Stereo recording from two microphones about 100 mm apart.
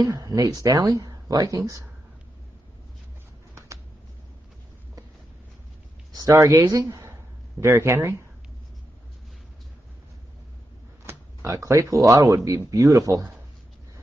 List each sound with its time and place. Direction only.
0.0 s speech: 35° right (ahead or behind)
3.5 s a sound: 30° right (ahead or behind)
6.1 s speech: 35° right (ahead or behind)
7.6 s speech: 25° right (ahead or behind)
11.1 s speech: 30° right (ahead or behind)